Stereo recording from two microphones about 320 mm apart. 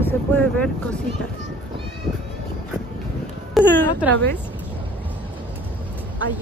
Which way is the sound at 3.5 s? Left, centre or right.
Centre.